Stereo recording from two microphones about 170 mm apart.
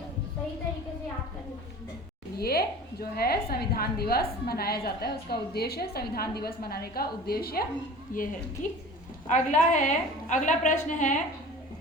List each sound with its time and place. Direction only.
2.4 s a woman's voice: 65° left (ahead or behind)
8.1 s a woman's voice: 50° left (ahead or behind)
9.3 s a woman's voice: 45° left (ahead or behind)